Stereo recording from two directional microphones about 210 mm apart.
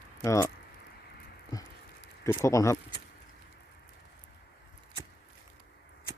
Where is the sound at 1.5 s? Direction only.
20° left (ahead or behind).